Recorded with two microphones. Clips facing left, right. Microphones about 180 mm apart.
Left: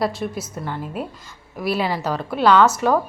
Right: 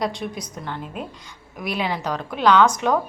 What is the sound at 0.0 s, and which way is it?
A woman's voice, 5° left (ahead or behind).